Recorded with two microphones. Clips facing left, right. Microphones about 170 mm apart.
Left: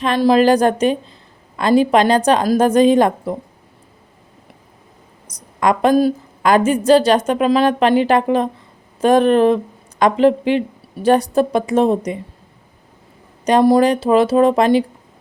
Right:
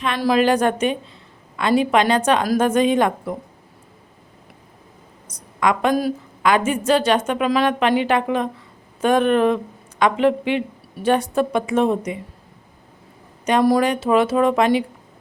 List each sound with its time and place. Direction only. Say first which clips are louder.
0.2 s a woman's voice: left 5 dB; 30° left (ahead or behind)
5.3 s a woman's voice: left 3 dB; 40° left (ahead or behind)
6.4 s a woman's voice: left 4 dB; 40° left (ahead or behind)
13.4 s a woman's voice: left 4 dB; 30° left (ahead or behind)